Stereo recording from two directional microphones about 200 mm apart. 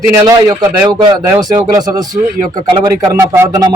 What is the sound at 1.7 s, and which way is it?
A man's voice, 20° right (ahead or behind).